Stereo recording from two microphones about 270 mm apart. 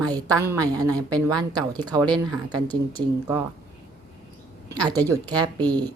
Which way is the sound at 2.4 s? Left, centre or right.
Centre.